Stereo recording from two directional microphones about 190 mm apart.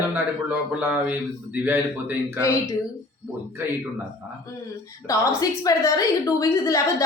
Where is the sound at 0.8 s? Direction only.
10° right (ahead or behind).